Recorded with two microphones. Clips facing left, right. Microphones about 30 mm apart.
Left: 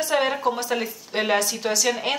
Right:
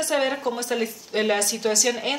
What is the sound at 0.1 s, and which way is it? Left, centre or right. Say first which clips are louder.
A woman's voice: left 2 dB; centre.